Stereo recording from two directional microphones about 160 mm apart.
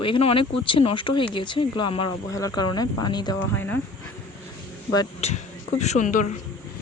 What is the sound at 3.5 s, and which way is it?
Speech, 10° left (ahead or behind).